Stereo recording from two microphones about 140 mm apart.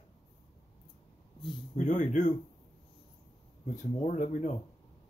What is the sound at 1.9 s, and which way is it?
Speech, 65° left (ahead or behind).